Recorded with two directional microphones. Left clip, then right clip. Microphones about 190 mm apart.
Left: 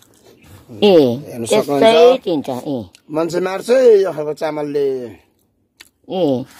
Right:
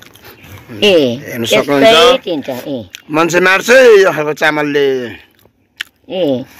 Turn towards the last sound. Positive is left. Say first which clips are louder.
# right 3 dB
turn(degrees=50)  # may be behind; listen again after turning